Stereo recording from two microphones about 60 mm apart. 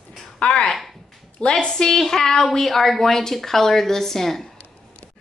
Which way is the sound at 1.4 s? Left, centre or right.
Centre.